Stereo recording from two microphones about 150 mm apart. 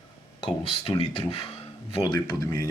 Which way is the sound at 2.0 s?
25° left (ahead or behind).